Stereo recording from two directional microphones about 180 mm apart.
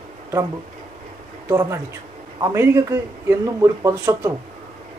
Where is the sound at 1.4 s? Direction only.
15° right (ahead or behind).